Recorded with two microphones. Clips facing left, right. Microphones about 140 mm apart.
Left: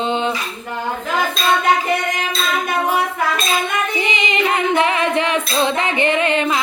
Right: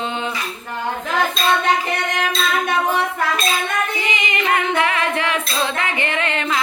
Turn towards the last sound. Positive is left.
turn(degrees=20)  # may be behind; listen again after turning